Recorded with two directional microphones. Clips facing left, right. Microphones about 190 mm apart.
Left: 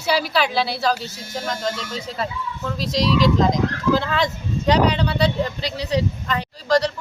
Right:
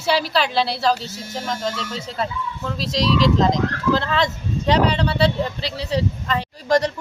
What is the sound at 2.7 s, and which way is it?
Speech, 25° right (ahead or behind).